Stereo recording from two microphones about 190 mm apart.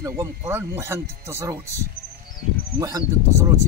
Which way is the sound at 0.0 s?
15° right (ahead or behind).